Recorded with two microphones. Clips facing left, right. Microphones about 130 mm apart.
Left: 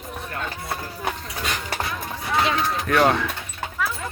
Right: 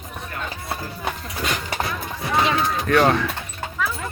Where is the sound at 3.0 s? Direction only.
5° left (ahead or behind).